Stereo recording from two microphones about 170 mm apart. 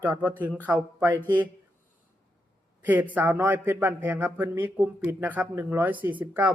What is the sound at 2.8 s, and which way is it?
A man's voice, 10° right (ahead or behind).